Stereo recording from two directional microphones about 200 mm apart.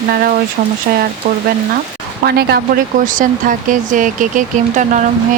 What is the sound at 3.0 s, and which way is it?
Speech, 40° right (ahead or behind).